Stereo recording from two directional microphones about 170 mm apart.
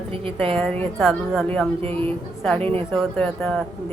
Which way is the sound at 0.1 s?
35° right (ahead or behind).